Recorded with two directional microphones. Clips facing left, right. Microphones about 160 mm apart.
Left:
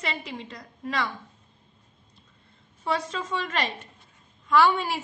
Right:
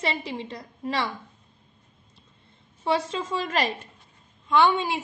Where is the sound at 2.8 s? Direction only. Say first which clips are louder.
Right 3 dB; 30° right (ahead or behind).